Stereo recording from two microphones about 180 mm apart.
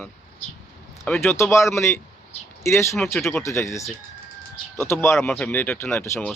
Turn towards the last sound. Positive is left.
turn(degrees=15)  # may be behind; listen again after turning